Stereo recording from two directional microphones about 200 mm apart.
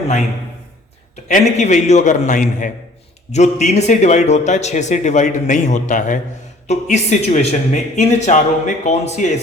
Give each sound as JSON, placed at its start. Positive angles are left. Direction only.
{"t": 1.3, "sound": "speech", "side_deg": 35}